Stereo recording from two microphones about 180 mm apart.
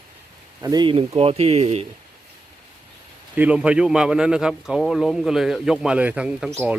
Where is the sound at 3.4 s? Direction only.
5° right (ahead or behind).